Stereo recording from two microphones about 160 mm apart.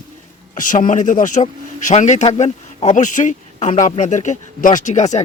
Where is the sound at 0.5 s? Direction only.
55° left (ahead or behind).